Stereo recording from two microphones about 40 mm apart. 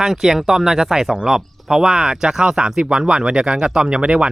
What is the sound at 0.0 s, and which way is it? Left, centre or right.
Speech, centre.